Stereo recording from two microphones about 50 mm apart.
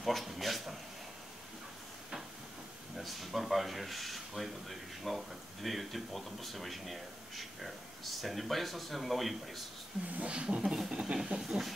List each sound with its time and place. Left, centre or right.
0.0 s speech: centre
3.0 s speech: centre
10.1 s speech: right
10.6 s speech: centre
10.9 s speech: centre
11.4 s a sound: centre